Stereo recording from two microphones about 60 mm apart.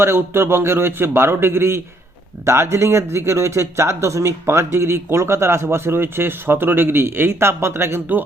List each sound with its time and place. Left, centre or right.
0.0 s speech: right